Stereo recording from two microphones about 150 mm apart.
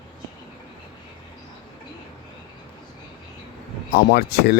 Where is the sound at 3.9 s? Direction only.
90° left.